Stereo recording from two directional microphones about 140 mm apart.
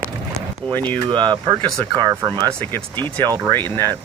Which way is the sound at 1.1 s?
35° right (ahead or behind).